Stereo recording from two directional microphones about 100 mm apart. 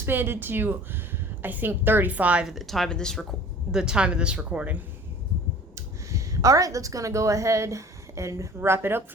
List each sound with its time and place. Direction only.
0.0 s a woman's voice: 20° right (ahead or behind); by 3.2 s 5° left (ahead or behind)
3.7 s speech: 5° right (ahead or behind)
5.7 s a woman's voice: 30° right (ahead or behind)